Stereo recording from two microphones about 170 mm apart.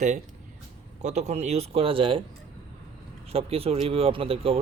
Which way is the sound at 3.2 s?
35° right (ahead or behind).